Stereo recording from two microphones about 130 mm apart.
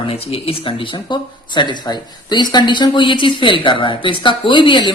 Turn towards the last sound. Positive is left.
turn(degrees=35)  # may be behind; listen again after turning